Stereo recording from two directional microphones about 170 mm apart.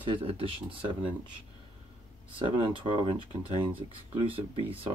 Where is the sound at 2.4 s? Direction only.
30° right (ahead or behind).